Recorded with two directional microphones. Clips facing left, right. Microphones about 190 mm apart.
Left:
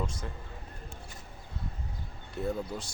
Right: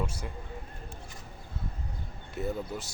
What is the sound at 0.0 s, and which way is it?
Speech, 10° right (ahead or behind).